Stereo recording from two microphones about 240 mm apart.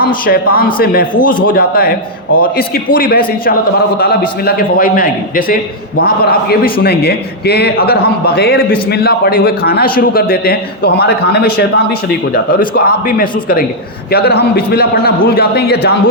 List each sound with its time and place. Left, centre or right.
0.0 s a man's voice: left